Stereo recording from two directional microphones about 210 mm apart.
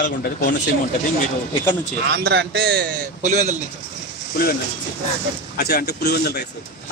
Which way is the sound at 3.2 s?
35° right (ahead or behind).